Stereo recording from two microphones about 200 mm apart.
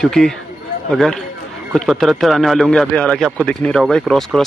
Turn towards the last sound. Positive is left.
turn(degrees=0)  # may be behind; listen again after turning